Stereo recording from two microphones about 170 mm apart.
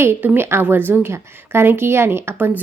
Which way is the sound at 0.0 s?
15° right (ahead or behind).